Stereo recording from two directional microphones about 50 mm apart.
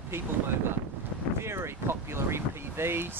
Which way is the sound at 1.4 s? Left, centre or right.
Right.